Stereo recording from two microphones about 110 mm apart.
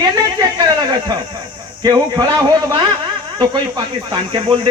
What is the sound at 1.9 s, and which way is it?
Speech, 25° right (ahead or behind).